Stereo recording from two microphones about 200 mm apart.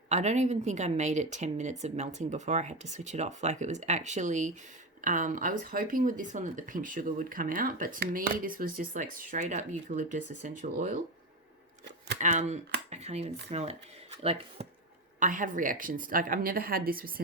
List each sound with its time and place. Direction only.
0.1 s speech: 35° right (ahead or behind)
12.2 s speech: 35° right (ahead or behind)
15.2 s speech: 40° right (ahead or behind)